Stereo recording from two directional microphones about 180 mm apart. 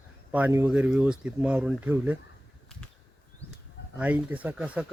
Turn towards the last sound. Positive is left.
turn(degrees=-5)  # may be behind; listen again after turning